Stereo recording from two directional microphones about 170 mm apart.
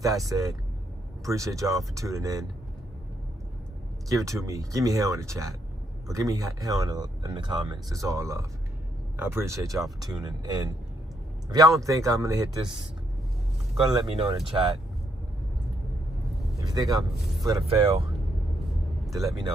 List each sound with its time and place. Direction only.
0.0 s speech: 20° right (ahead or behind)
4.1 s speech: 20° right (ahead or behind)
13.9 s speech: 25° right (ahead or behind)
16.7 s speech: 20° right (ahead or behind)
19.0 s speech: centre (ahead or behind)